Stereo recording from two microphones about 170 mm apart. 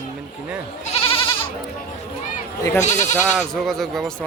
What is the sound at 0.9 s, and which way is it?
Goat, 35° left (ahead or behind).